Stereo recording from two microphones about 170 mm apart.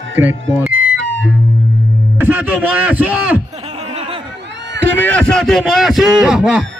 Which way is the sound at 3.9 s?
35° right (ahead or behind).